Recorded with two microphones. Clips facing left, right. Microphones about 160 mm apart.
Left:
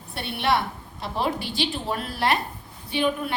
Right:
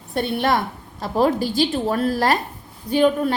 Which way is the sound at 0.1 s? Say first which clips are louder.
Right 4 dB; 45° right (ahead or behind).